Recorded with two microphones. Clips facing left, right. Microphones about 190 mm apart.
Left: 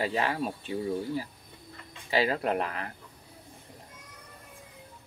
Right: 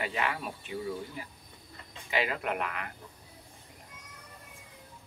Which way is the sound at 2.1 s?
35° left (ahead or behind).